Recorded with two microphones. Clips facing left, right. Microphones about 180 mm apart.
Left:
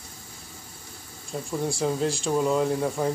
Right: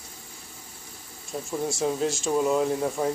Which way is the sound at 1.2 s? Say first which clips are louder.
Left 1 dB; centre (ahead or behind).